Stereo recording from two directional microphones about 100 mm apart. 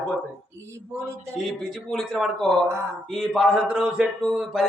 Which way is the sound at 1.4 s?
5° left (ahead or behind).